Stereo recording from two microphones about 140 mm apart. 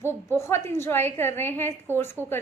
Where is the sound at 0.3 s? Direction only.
20° left (ahead or behind).